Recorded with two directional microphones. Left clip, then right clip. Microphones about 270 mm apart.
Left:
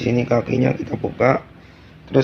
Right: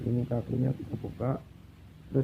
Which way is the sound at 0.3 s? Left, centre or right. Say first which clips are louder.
Left 15 dB; left.